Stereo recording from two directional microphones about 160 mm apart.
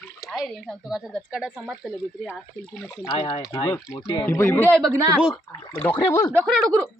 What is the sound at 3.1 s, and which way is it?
Speech, 35° left (ahead or behind).